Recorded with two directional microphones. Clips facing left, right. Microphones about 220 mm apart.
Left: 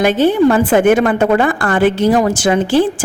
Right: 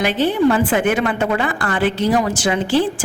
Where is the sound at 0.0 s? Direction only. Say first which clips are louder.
Left 5 dB; 45° left (ahead or behind).